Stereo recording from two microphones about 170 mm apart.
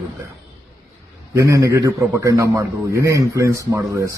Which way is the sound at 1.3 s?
20° right (ahead or behind).